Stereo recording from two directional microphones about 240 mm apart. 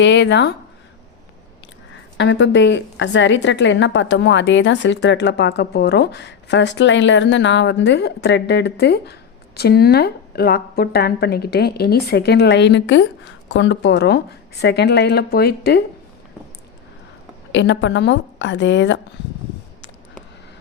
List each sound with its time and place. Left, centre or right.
0.0 s a woman's voice: left
2.1 s a woman's voice: left
17.5 s a woman's voice: left